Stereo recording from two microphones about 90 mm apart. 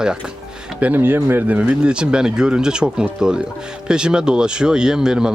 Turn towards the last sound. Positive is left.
turn(degrees=-5)  # may be behind; listen again after turning